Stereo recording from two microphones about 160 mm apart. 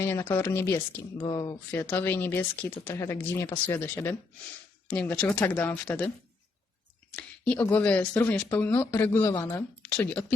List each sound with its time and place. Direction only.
0.0 s speech: 15° left (ahead or behind)
1.7 s speech: 10° left (ahead or behind)
7.2 s speech: 10° left (ahead or behind)